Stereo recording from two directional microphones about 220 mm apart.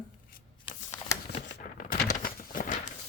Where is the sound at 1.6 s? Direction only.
40° left (ahead or behind).